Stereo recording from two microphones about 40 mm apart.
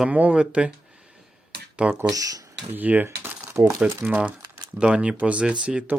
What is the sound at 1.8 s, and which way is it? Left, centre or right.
Speech, right.